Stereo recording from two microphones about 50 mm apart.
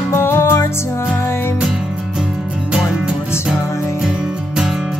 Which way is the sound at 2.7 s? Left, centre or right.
Right.